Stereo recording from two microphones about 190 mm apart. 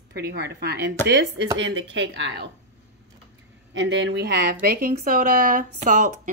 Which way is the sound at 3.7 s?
70° right (ahead or behind).